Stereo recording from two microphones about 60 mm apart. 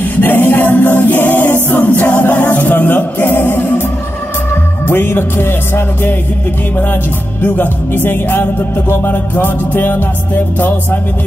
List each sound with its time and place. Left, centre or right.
0.0 s a capella: left
4.8 s music: left
7.4 s music: left